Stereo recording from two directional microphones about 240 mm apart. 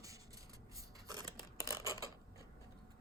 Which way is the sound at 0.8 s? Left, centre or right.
Centre.